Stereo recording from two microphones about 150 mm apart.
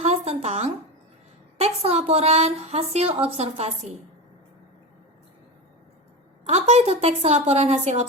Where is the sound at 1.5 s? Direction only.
45° right (ahead or behind).